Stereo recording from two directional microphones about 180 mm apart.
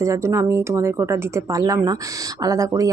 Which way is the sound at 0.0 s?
15° right (ahead or behind).